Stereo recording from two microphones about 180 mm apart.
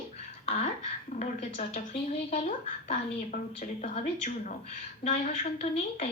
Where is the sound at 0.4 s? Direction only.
35° left (ahead or behind).